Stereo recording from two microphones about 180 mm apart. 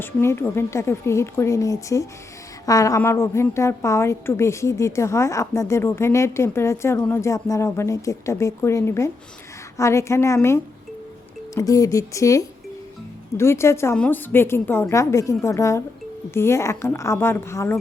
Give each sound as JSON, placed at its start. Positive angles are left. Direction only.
{"t": 0.0, "sound": "a woman's voice", "side_deg": 15}